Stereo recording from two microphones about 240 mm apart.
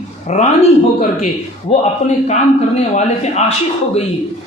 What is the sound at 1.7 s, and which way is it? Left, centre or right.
A man's voice, left.